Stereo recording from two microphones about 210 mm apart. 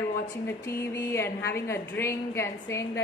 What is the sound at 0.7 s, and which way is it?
A man's voice, 15° left (ahead or behind).